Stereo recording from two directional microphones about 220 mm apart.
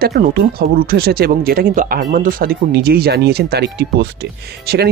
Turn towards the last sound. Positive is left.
turn(degrees=-45)  # may be behind; listen again after turning